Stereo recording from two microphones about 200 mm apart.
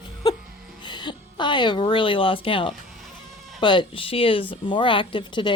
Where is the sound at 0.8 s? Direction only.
25° left (ahead or behind).